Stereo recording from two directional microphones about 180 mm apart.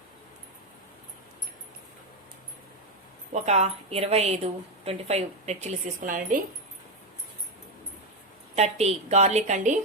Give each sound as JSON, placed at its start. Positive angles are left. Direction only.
{"t": 3.3, "sound": "a woman's voice", "side_deg": -35}
{"t": 8.5, "sound": "a woman's voice", "side_deg": -35}